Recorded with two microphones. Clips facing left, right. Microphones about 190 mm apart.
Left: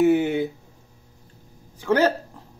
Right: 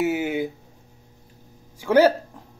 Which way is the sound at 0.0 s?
5° right (ahead or behind).